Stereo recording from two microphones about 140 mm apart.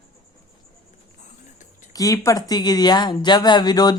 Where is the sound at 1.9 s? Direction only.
25° left (ahead or behind).